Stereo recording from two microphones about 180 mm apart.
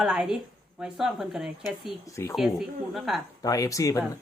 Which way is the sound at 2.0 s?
15° left (ahead or behind).